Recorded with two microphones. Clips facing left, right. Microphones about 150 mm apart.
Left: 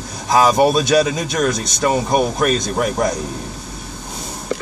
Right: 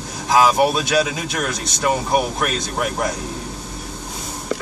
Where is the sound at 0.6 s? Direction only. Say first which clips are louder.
Left 3 dB; 25° left (ahead or behind).